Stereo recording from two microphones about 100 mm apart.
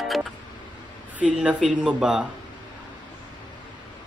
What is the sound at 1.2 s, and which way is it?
A man's voice, 10° right (ahead or behind).